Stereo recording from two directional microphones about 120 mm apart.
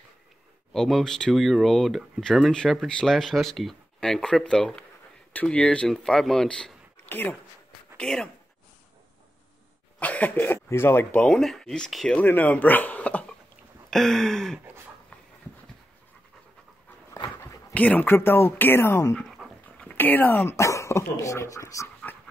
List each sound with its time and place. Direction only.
0.7 s speech: 5° left (ahead or behind)
9.9 s speech: 10° left (ahead or behind)
11.1 s speech: 5° left (ahead or behind)
17.4 s dog: 25° left (ahead or behind)
17.7 s speech: 15° left (ahead or behind)
19.2 s dog: centre (ahead or behind)
19.8 s speech: 15° left (ahead or behind)